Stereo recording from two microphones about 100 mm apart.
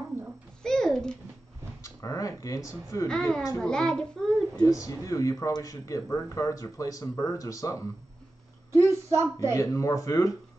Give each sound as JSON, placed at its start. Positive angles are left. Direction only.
{"t": 0.6, "sound": "babbling", "side_deg": 5}
{"t": 1.8, "sound": "speech", "side_deg": 35}
{"t": 3.1, "sound": "a child's voice", "side_deg": 5}
{"t": 4.6, "sound": "speech", "side_deg": 35}
{"t": 9.1, "sound": "speech", "side_deg": -25}
{"t": 9.6, "sound": "speech", "side_deg": 30}